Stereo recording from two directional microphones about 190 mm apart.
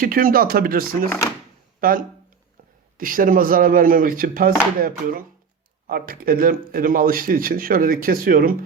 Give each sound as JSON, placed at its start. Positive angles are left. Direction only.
{"t": 0.0, "sound": "speech", "side_deg": -50}